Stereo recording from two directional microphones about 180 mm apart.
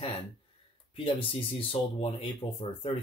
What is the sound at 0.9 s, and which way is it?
Speech, 30° left (ahead or behind).